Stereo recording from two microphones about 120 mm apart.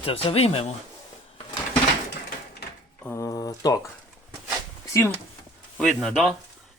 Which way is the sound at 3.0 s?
25° left (ahead or behind).